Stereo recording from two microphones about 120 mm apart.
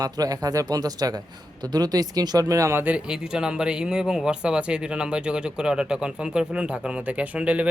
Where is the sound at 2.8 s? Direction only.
10° right (ahead or behind).